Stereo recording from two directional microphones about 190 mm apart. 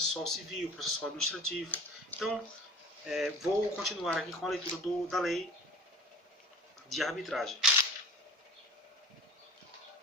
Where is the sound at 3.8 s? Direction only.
Centre (ahead or behind).